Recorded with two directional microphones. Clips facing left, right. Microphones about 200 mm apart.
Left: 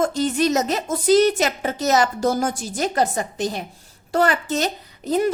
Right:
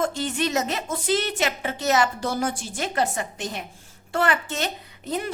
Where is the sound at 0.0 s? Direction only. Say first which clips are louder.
Left 5 dB; 40° left (ahead or behind).